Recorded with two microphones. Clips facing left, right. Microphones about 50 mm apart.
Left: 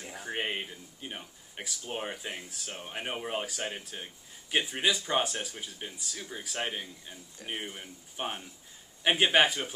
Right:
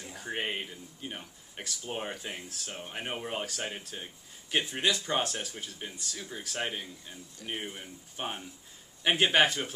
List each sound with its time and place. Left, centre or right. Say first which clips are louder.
0.2 s speech: even; centre
7.4 s speech: even; left
8.2 s speech: left 1 dB; centre